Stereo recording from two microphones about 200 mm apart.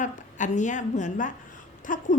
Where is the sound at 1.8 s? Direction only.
40° left (ahead or behind).